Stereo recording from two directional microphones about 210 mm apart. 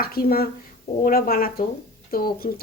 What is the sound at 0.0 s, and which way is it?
Speech, 45° left (ahead or behind).